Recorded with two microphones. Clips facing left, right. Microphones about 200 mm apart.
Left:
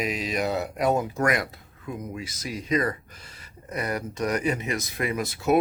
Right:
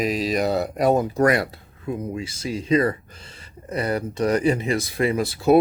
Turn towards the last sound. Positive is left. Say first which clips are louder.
# right 6 dB
turn(degrees=-30)  # may be behind; listen again after turning